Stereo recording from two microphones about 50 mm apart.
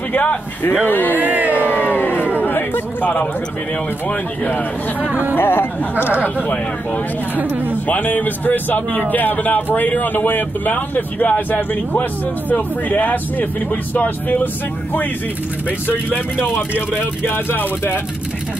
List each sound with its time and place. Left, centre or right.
0.1 s a man's voice: left
1.1 s cat: right
1.5 s crowd: left
2.2 s chatter: left
4.5 s a man's voice: left
5.3 s speech: left
7.3 s speech: right
7.9 s a man's voice: left
15.9 s a man's voice: left